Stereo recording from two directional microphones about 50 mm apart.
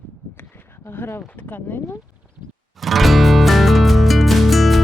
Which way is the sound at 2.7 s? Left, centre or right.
Centre.